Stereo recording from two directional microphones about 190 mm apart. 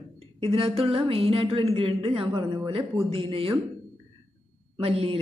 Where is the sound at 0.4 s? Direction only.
30° right (ahead or behind).